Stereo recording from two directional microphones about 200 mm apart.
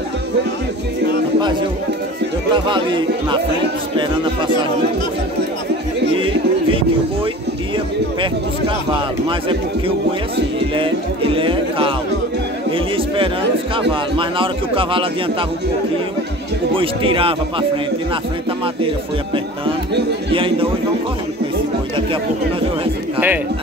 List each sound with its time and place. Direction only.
2.5 s speech: 25° right (ahead or behind)
6.1 s music: 25° right (ahead or behind)
11.3 s speech: 25° right (ahead or behind)
16.7 s speech: 25° right (ahead or behind)
20.2 s speech: 25° right (ahead or behind)
23.1 s speech: 10° right (ahead or behind)